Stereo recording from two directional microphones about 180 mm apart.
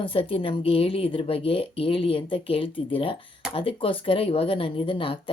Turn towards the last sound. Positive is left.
turn(degrees=30)  # may be behind; listen again after turning